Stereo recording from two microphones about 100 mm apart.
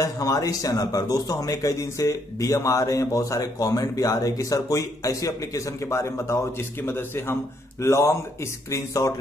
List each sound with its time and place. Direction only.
0.0 s a man's voice: 35° left (ahead or behind)